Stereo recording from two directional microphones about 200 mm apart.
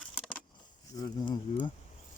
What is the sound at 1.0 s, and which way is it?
Insect, 20° left (ahead or behind).